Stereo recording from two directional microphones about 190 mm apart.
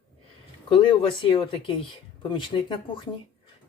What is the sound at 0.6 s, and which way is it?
Speech, 25° left (ahead or behind).